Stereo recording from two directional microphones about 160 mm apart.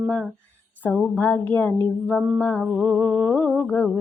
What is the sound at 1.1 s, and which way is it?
Speech, 10° left (ahead or behind).